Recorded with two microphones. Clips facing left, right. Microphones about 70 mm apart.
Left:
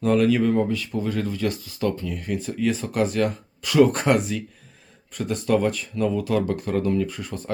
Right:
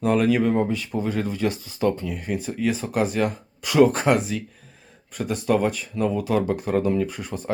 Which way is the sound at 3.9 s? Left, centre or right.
Centre.